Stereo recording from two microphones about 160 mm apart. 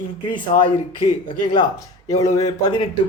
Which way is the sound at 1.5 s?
25° left (ahead or behind).